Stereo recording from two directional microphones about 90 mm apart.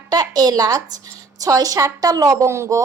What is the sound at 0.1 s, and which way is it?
A woman's voice, 45° right (ahead or behind).